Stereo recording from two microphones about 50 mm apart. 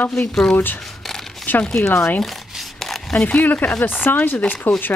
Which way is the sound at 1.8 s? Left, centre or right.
Left.